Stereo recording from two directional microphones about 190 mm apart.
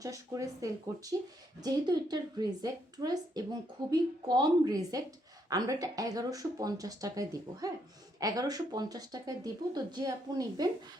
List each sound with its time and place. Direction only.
0.0 s speech: 15° right (ahead or behind)